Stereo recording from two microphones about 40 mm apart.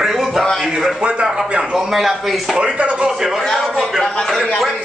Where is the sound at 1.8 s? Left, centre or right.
Centre.